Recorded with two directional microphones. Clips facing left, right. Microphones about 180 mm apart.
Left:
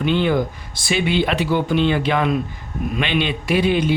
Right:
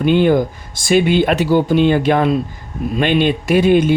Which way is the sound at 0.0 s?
45° right (ahead or behind).